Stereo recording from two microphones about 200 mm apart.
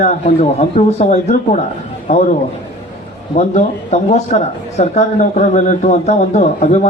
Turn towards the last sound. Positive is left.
turn(degrees=35)  # may be behind; listen again after turning